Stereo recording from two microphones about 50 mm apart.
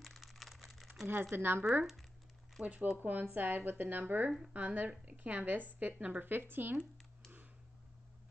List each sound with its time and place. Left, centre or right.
0.0 s a sound: centre
1.3 s speech: right
2.6 s a woman's voice: right